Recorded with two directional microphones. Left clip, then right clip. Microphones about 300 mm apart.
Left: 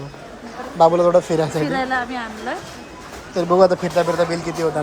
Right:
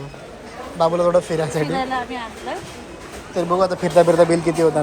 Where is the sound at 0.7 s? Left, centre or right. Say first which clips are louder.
Left 3 dB; centre.